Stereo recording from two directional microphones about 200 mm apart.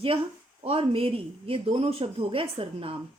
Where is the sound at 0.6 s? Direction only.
30° right (ahead or behind).